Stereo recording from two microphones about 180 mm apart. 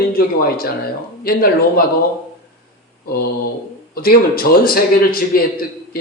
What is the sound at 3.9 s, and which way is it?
A man's voice, 55° left (ahead or behind).